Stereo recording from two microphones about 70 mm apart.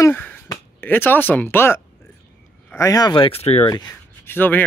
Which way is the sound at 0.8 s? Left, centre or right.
Left.